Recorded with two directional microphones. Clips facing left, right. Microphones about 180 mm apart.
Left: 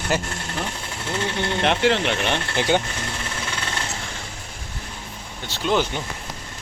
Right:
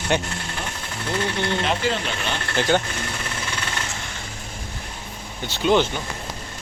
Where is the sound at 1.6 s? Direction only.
70° left (ahead or behind).